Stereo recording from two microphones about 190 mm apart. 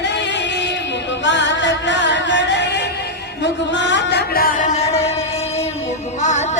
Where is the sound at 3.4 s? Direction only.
70° left (ahead or behind); by 5.1 s 35° left (ahead or behind).